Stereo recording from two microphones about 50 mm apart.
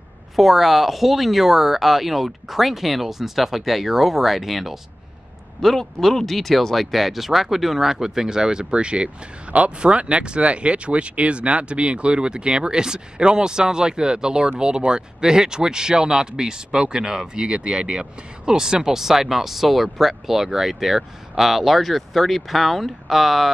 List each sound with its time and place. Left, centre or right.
0.4 s speech: centre